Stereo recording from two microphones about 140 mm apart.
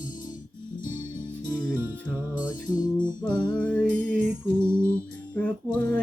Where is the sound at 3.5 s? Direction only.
10° left (ahead or behind).